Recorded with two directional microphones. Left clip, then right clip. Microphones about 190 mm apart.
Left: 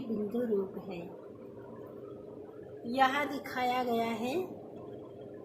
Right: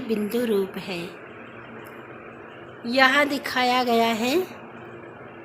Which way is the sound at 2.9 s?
45° right (ahead or behind).